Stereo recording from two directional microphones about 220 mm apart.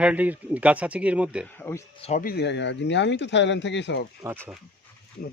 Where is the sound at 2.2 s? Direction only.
50° left (ahead or behind).